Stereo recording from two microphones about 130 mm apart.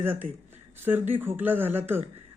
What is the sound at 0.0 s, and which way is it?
Speech, 15° right (ahead or behind).